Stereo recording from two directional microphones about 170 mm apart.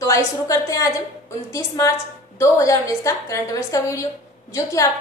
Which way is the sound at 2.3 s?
15° left (ahead or behind).